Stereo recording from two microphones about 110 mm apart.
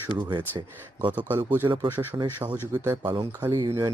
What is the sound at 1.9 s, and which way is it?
Speech, 20° right (ahead or behind).